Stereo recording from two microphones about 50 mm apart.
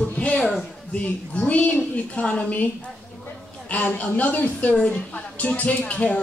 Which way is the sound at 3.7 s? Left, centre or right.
Left.